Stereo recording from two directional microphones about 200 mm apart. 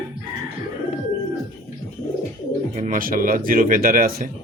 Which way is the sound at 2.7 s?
40° right (ahead or behind).